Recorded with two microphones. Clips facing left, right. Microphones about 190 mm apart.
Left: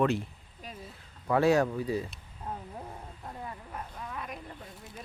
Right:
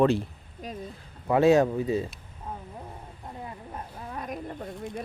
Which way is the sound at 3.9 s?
35° right (ahead or behind).